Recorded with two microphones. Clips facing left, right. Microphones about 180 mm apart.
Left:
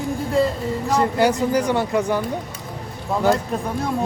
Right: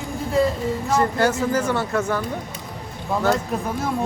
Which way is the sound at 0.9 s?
15° left (ahead or behind).